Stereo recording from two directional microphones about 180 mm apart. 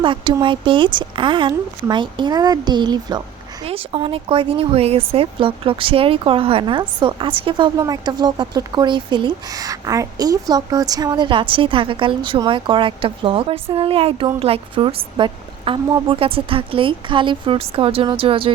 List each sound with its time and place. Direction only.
0.0 s speech: 25° right (ahead or behind)